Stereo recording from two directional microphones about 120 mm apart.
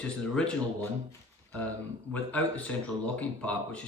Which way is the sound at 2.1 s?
10° left (ahead or behind).